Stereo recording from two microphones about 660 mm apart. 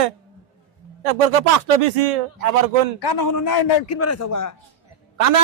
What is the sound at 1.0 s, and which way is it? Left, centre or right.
Speech, right.